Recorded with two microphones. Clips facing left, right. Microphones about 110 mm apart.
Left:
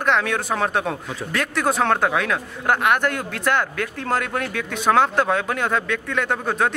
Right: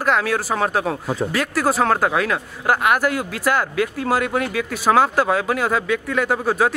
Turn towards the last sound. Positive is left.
turn(degrees=-5)  # may be behind; listen again after turning